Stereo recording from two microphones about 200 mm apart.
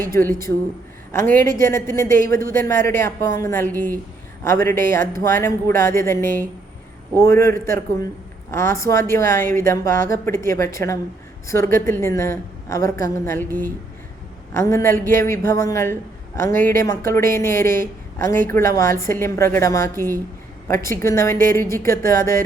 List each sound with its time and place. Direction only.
0.1 s speech: 10° left (ahead or behind)
3.7 s a woman's voice: 45° right (ahead or behind)
4.4 s speech: 10° left (ahead or behind)